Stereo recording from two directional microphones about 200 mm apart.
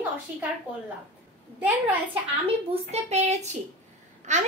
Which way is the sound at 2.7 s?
35° right (ahead or behind).